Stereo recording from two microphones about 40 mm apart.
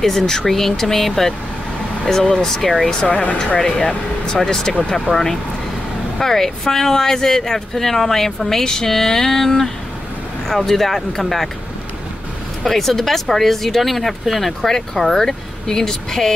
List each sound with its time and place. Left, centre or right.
0.0 s speech: centre
3.1 s speech: left
3.5 s speech: left; by 11.5 s centre
12.6 s speech: centre